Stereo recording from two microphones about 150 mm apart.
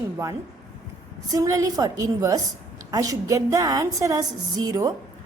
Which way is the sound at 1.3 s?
20° right (ahead or behind).